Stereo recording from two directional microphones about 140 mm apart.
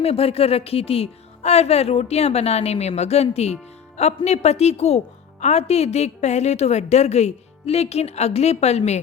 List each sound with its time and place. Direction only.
0.0 s speech: 45° left (ahead or behind)